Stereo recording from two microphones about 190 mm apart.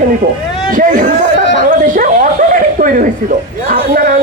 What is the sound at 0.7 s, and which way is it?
A man's voice, 45° right (ahead or behind).